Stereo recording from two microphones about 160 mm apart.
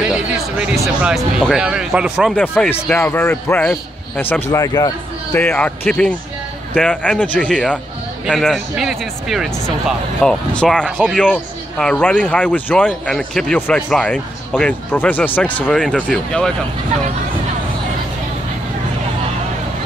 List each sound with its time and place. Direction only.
0.1 s speech: 5° right (ahead or behind)
2.3 s speech: 10° left (ahead or behind)
5.3 s speech: 10° left (ahead or behind)